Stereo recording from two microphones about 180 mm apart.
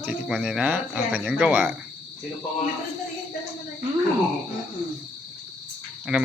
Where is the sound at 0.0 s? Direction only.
5° right (ahead or behind).